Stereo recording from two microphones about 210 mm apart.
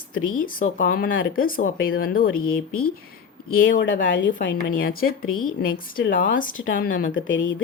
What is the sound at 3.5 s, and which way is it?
Speech, 45° left (ahead or behind).